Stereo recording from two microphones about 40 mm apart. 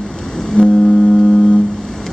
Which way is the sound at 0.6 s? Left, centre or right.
Left.